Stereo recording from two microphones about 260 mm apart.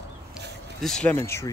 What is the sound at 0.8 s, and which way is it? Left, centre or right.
Speech, centre.